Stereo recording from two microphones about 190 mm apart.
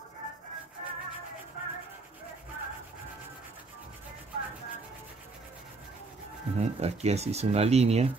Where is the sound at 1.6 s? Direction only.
40° left (ahead or behind).